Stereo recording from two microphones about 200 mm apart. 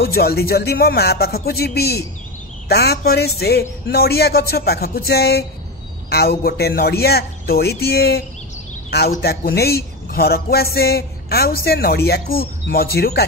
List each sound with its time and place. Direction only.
0.0 s a man's voice: 50° left (ahead or behind)